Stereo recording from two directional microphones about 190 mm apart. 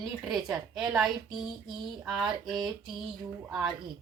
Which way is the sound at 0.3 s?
Centre (ahead or behind).